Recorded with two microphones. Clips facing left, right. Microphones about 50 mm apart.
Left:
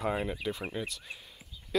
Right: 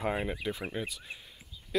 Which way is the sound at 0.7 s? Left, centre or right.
Centre.